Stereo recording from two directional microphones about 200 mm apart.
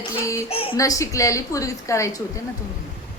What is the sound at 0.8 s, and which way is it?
A woman's voice, 15° left (ahead or behind).